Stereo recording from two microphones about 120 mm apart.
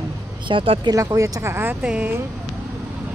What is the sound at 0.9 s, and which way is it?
Speech, 30° right (ahead or behind).